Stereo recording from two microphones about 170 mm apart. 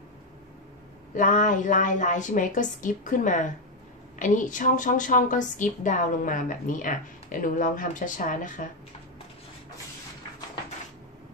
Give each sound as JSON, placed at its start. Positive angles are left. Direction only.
{"t": 1.1, "sound": "a woman's voice", "side_deg": 50}